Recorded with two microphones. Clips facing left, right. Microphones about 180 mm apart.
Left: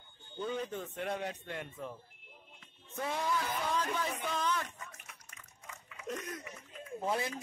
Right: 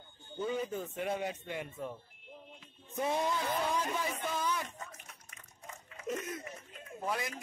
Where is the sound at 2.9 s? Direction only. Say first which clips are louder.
Right 2 dB; 20° right (ahead or behind).